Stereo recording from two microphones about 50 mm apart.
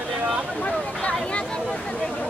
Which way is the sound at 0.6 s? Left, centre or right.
Left.